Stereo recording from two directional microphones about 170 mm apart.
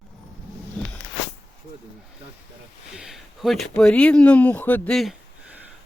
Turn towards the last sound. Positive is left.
turn(degrees=0)  # may be behind; listen again after turning